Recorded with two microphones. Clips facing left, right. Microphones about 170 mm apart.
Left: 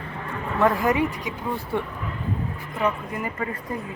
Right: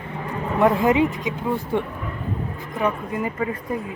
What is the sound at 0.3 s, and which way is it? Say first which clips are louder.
Speech: right 3 dB; 20° right (ahead or behind).